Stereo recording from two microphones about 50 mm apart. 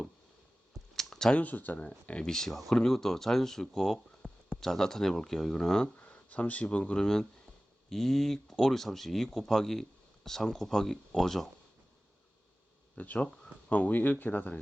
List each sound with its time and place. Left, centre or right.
0.9 s a sound: centre
1.4 s speech: left
2.2 s speech: centre
6.0 s speech: left
6.9 s speech: centre
13.0 s speech: left